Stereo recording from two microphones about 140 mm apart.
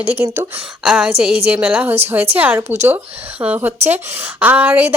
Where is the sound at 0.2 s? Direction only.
15° right (ahead or behind).